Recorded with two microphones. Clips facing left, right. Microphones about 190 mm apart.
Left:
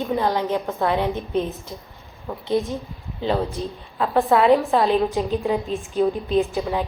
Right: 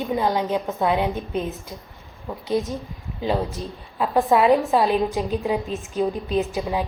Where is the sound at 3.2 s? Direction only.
10° right (ahead or behind).